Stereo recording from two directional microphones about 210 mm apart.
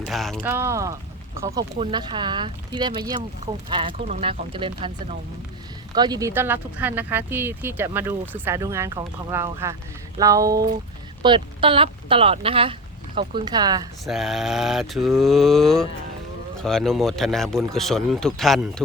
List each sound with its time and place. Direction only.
0.0 s speech: centre (ahead or behind)
0.4 s speech: 10° right (ahead or behind)
5.9 s speech: 20° right (ahead or behind)
14.0 s speech: centre (ahead or behind)